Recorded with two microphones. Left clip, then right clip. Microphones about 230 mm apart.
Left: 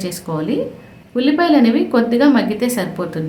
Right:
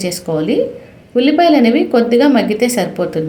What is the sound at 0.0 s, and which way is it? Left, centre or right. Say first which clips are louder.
A woman's voice: right 6 dB; centre.